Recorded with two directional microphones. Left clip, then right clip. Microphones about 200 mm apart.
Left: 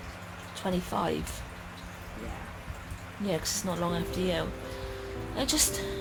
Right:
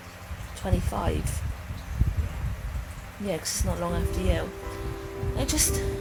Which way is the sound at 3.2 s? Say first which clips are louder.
Right 1 dB; 5° right (ahead or behind).